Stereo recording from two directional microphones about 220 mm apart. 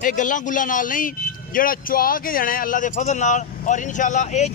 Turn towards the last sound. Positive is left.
turn(degrees=30)  # may be behind; listen again after turning